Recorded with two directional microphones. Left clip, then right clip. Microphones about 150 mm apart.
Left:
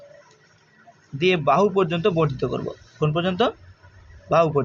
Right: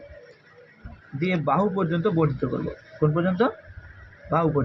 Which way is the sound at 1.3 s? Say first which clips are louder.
Left 5 dB; 45° left (ahead or behind).